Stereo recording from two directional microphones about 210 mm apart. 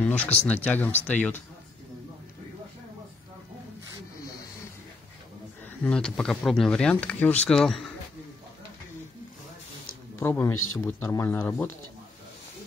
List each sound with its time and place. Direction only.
0.0 s speech: 5° left (ahead or behind)
5.7 s speech: 5° left (ahead or behind)
10.1 s a man's voice: 10° left (ahead or behind)
10.5 s speech: 80° left
10.9 s speech: 15° left (ahead or behind)